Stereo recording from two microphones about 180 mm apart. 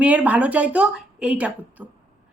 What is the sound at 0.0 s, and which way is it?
Speech, 5° right (ahead or behind).